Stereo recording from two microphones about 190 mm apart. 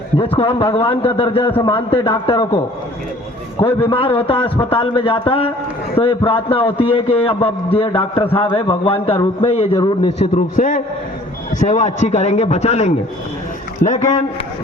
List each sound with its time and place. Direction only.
0.3 s a man's voice: 30° left (ahead or behind)
3.6 s a man's voice: 25° left (ahead or behind)
10.3 s a man's voice: 45° left (ahead or behind)